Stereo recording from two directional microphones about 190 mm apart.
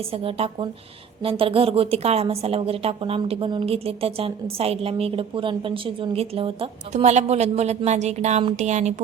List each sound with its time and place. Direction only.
0.1 s a woman's voice: 30° right (ahead or behind)